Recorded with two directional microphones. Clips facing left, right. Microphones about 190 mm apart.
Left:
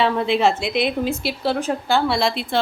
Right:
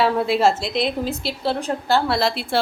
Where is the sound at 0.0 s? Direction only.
5° right (ahead or behind).